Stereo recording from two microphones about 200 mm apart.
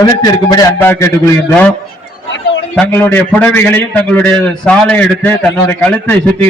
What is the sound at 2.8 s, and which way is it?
A man's voice, 10° left (ahead or behind).